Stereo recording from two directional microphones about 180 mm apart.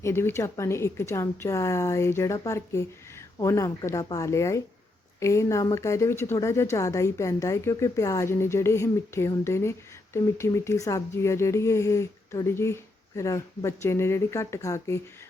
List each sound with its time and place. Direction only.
0.0 s a woman's voice: 15° left (ahead or behind)